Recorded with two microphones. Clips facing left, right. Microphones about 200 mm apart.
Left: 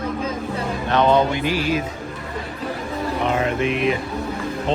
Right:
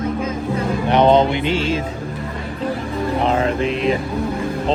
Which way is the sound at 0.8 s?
20° right (ahead or behind).